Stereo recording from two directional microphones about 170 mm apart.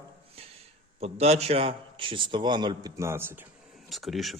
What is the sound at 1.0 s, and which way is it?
Speech, 35° right (ahead or behind).